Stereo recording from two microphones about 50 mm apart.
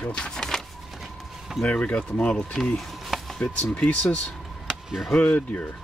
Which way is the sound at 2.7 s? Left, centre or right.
Centre.